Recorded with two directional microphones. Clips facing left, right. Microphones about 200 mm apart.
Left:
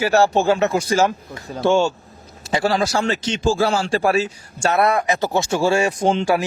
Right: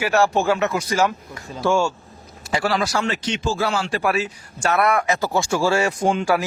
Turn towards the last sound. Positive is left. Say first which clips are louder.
# left 2 dB
turn(degrees=25)  # may be behind; listen again after turning